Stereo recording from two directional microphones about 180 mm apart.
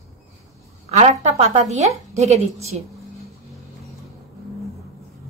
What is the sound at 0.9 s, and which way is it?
A woman's voice, 35° right (ahead or behind).